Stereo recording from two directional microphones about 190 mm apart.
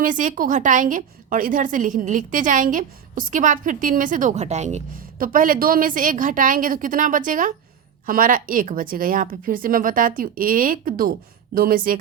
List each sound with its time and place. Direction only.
0.0 s a woman's voice: 40° right (ahead or behind)